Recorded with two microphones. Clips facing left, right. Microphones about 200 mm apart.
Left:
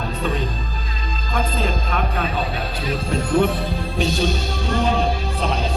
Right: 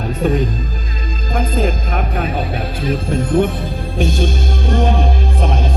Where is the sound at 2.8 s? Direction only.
50° right (ahead or behind).